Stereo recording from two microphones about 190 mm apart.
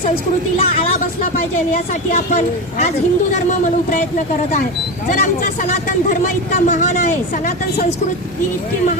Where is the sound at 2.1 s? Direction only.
40° left (ahead or behind).